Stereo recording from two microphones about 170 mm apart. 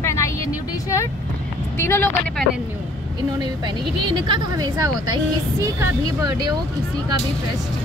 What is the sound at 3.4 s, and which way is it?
Speech, 25° right (ahead or behind).